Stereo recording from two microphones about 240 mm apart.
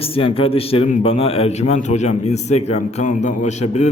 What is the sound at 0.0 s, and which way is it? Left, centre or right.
A man's voice, left.